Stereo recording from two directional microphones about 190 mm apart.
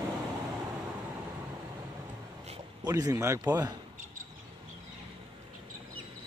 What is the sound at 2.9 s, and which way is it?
Speech, 20° right (ahead or behind).